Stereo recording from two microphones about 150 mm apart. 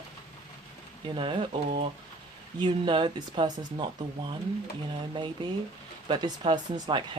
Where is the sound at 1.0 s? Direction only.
35° right (ahead or behind).